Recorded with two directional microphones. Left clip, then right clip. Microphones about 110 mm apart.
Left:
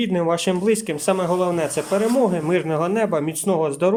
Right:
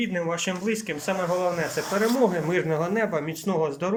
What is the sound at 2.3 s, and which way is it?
Speech, 20° left (ahead or behind).